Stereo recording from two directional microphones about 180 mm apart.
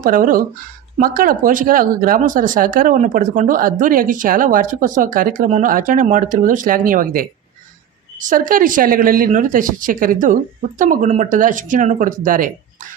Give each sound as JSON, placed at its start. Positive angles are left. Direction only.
{"t": 0.0, "sound": "speech", "side_deg": -50}